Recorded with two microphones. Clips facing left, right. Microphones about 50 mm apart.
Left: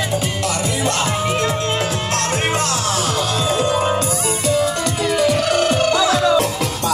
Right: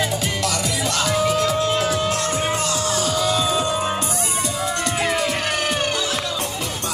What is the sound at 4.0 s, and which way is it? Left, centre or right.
Music, left.